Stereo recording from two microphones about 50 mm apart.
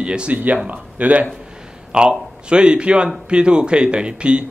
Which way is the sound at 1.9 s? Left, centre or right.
Centre.